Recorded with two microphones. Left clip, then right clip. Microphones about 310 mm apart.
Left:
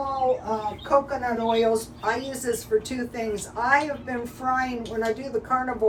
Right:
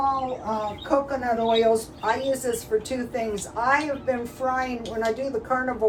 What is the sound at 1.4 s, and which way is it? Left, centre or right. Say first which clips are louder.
Speech: right 1 dB; centre.